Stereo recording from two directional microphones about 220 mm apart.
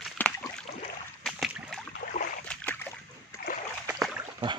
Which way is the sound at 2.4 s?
10° left (ahead or behind).